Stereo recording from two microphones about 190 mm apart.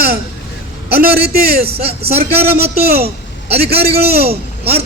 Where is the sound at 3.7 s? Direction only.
30° right (ahead or behind).